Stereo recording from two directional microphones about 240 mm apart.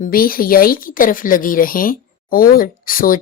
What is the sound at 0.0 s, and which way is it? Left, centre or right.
Speech, left.